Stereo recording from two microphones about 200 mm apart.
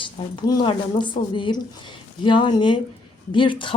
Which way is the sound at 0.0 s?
20° left (ahead or behind).